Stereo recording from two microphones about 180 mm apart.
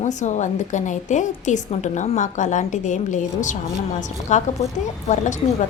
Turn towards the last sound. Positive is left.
turn(degrees=40)  # may be behind; listen again after turning